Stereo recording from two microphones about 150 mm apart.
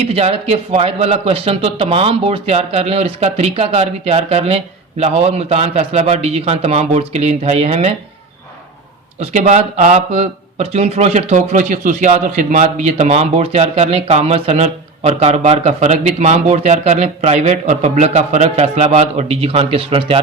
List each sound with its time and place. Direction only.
0.1 s speech: 45° right (ahead or behind)
9.3 s speech: 50° right (ahead or behind)